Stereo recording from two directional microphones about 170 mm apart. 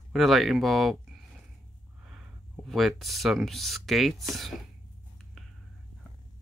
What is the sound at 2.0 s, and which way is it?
Speech, 5° right (ahead or behind).